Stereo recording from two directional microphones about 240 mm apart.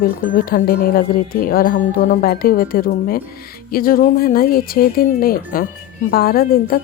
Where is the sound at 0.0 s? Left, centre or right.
Left.